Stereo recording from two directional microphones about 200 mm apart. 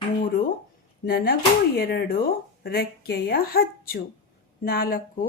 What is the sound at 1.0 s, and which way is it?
A woman's voice, 50° left (ahead or behind).